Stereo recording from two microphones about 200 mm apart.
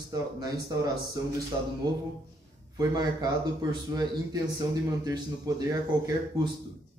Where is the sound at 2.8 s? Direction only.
20° right (ahead or behind).